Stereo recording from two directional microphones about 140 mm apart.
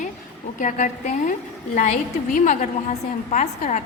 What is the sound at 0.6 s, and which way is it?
Speech, 65° left (ahead or behind).